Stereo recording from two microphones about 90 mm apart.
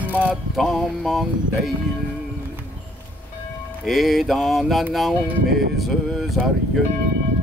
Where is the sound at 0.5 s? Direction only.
Centre (ahead or behind).